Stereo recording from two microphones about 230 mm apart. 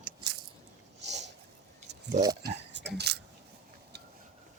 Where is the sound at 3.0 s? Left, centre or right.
Right.